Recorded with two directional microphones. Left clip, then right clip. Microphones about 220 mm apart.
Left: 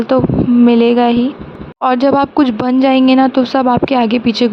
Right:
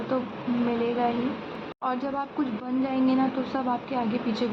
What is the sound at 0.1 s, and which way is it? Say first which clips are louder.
Speech: left 17 dB; 50° left (ahead or behind).